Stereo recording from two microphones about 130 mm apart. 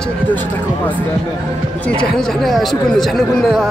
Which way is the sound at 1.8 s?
5° left (ahead or behind).